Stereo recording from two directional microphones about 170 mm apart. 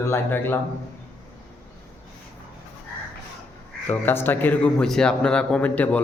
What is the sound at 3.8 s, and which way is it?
Speech, 10° left (ahead or behind).